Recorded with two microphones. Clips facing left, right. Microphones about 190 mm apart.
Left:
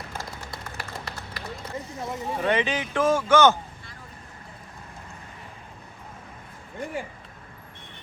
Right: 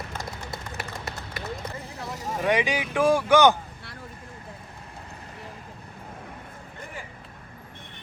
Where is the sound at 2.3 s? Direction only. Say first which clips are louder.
Right 1 dB; 10° right (ahead or behind).